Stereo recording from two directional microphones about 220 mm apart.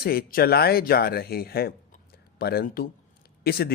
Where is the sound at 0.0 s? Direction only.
45° left (ahead or behind).